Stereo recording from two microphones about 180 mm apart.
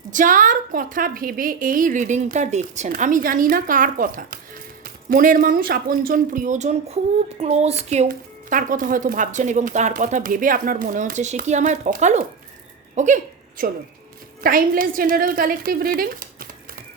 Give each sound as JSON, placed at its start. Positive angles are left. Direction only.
{"t": 0.1, "sound": "speech", "side_deg": -45}